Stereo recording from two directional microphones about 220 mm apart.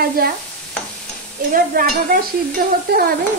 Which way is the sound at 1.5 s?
40° right (ahead or behind).